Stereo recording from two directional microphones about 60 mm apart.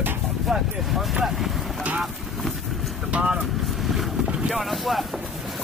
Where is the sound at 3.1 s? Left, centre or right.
Centre.